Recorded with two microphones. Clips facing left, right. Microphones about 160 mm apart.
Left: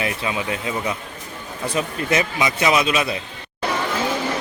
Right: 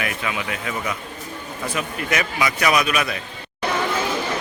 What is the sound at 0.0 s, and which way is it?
A man's voice, 25° left (ahead or behind).